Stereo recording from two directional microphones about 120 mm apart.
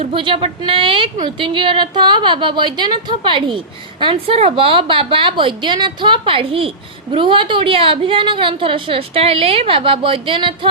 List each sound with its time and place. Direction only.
0.1 s a woman's voice: 45° right (ahead or behind)